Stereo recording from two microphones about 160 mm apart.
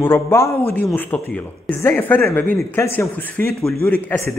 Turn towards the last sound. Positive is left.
turn(degrees=15)  # may be behind; listen again after turning